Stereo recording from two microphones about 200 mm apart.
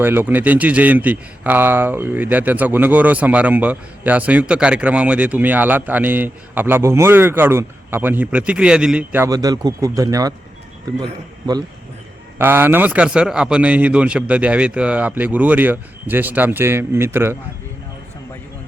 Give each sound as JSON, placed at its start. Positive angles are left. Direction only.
{"t": 0.0, "sound": "a man's voice", "side_deg": -10}